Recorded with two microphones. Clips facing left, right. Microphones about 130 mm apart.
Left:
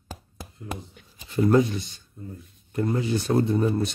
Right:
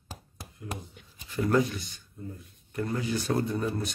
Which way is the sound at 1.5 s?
25° left (ahead or behind).